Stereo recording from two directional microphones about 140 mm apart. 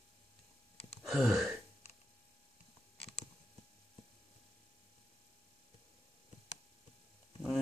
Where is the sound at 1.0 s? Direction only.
Centre (ahead or behind).